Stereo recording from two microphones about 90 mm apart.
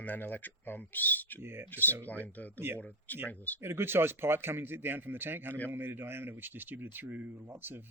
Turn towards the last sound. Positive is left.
turn(degrees=-20)  # may be behind; listen again after turning